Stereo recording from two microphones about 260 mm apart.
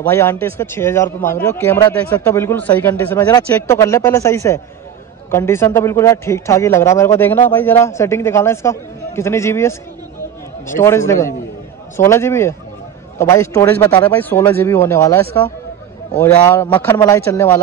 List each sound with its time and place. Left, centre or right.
0.0 s a man's voice: centre